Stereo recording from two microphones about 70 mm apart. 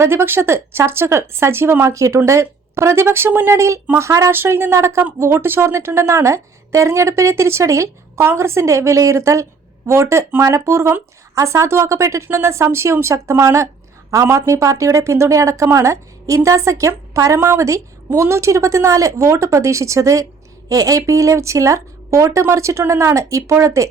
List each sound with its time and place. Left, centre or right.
0.0 s speech: right
1.9 s speech: right
4.3 s speech: right